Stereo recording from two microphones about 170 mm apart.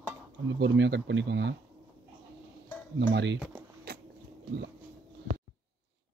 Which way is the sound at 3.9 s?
70° right (ahead or behind).